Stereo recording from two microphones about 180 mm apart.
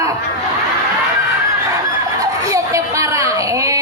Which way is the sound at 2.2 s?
20° right (ahead or behind).